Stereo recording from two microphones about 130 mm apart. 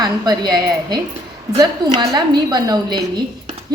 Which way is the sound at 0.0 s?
30° right (ahead or behind).